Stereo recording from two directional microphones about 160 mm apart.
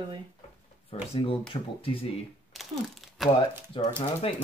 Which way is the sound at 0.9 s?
35° left (ahead or behind).